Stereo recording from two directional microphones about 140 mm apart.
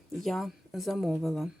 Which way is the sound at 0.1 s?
Centre (ahead or behind).